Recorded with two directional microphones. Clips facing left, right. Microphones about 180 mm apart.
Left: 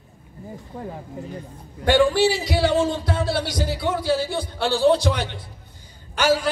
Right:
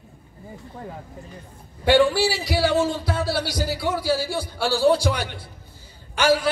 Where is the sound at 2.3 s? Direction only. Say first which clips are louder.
Left 1 dB; 20° left (ahead or behind).